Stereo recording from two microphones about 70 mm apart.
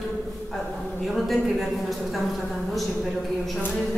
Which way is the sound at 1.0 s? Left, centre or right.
Centre.